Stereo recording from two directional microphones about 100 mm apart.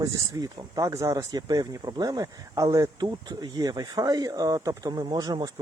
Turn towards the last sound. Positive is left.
turn(degrees=-40)  # may be behind; listen again after turning